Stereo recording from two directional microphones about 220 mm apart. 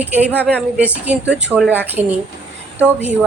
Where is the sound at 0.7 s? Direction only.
5° right (ahead or behind).